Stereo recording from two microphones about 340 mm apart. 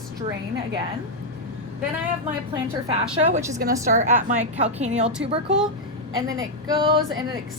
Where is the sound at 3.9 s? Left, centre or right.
Right.